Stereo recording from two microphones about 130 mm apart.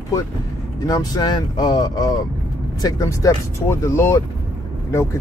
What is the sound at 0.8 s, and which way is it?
Speech, 30° left (ahead or behind).